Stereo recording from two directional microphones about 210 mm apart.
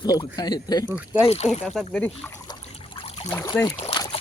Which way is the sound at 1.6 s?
Centre (ahead or behind).